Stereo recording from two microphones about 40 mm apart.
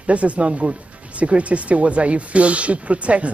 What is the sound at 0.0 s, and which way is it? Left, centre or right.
Speech, right.